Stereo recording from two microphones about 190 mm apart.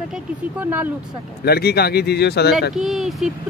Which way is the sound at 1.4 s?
55° left (ahead or behind).